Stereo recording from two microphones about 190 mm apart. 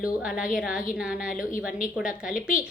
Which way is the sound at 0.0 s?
5° right (ahead or behind).